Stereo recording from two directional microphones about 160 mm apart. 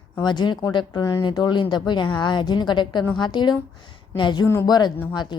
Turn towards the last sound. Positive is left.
turn(degrees=30)  # may be behind; listen again after turning